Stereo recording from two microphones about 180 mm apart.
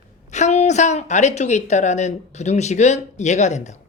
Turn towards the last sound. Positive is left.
turn(degrees=40)  # may be behind; listen again after turning